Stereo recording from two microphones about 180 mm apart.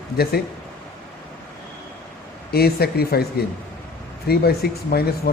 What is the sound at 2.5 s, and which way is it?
Speech, 60° left (ahead or behind).